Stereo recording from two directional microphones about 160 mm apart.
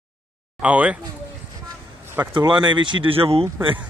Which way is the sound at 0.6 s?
10° right (ahead or behind).